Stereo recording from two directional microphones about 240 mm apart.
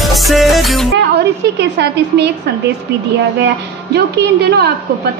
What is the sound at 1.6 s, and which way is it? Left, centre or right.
Speech, right.